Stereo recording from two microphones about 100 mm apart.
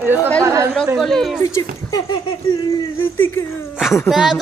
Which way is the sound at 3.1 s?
25° left (ahead or behind).